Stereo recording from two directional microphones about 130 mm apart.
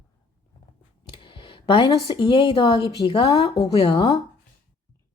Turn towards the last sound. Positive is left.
turn(degrees=35)  # may be behind; listen again after turning